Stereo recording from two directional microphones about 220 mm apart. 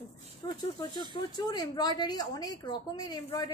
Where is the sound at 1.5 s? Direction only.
15° left (ahead or behind).